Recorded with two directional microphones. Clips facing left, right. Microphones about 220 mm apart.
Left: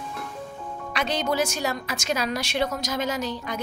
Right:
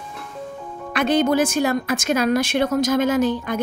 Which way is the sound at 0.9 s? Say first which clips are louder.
Right 9 dB; 55° right (ahead or behind).